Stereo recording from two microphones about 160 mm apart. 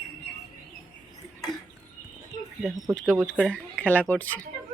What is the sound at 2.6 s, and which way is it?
Speech, centre (ahead or behind).